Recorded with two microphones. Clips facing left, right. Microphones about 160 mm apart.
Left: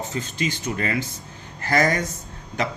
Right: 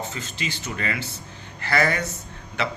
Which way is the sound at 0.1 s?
40° left (ahead or behind).